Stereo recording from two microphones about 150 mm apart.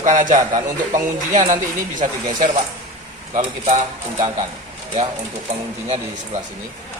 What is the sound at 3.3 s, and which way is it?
Speech, 50° right (ahead or behind).